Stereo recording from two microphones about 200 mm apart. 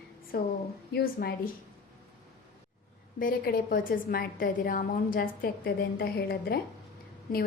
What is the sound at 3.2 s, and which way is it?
A woman's voice, 45° left (ahead or behind).